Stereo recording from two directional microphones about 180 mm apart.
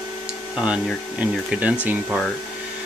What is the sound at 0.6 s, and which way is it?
Speech, 5° right (ahead or behind).